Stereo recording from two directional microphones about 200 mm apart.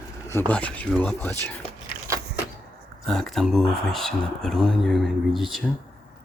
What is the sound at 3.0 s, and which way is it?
Speech, centre (ahead or behind).